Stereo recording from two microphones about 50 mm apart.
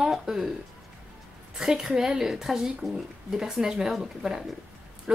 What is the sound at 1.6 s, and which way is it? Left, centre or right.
A woman's voice, centre.